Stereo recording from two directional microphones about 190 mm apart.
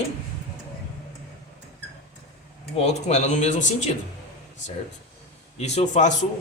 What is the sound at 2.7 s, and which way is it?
Speech, 35° left (ahead or behind).